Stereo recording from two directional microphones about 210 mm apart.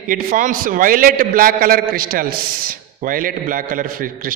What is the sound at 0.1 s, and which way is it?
A man's voice, 40° right (ahead or behind).